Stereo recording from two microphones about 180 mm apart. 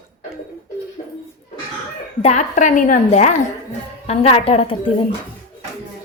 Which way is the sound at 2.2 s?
40° left (ahead or behind).